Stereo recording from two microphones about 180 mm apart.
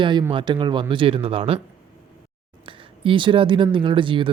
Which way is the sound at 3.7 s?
30° right (ahead or behind).